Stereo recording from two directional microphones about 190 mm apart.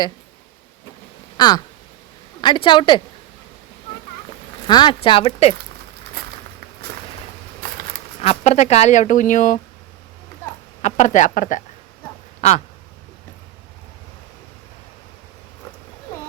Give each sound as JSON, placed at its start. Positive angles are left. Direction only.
{"t": 1.4, "sound": "a sound", "side_deg": 20}
{"t": 2.4, "sound": "a woman's voice", "side_deg": 25}
{"t": 4.6, "sound": "a woman's voice", "side_deg": 25}
{"t": 8.2, "sound": "speech", "side_deg": 35}
{"t": 10.8, "sound": "speech", "side_deg": 40}